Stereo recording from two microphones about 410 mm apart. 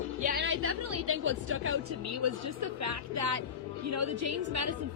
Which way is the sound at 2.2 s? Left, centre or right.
Right.